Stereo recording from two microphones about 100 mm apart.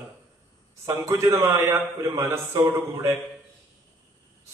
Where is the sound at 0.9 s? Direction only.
30° right (ahead or behind).